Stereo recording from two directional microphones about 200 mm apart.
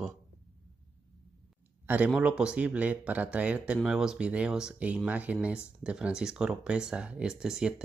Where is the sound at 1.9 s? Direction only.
5° right (ahead or behind).